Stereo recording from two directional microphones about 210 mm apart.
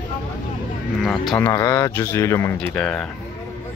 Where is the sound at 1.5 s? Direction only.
15° left (ahead or behind).